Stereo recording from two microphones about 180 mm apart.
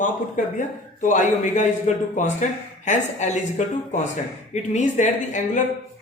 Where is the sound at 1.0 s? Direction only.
45° left (ahead or behind).